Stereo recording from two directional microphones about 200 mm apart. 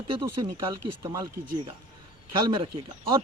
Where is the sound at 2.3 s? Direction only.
20° right (ahead or behind).